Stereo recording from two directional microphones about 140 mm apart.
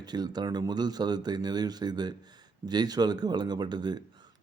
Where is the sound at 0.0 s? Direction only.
30° right (ahead or behind).